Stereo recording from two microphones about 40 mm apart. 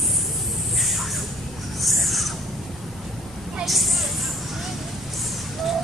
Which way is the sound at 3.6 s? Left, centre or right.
Centre.